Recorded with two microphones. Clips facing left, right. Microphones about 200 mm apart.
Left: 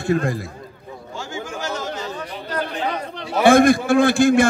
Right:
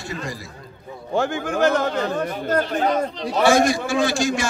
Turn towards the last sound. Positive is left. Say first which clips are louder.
# left 7 dB
turn(degrees=55)  # may be behind; listen again after turning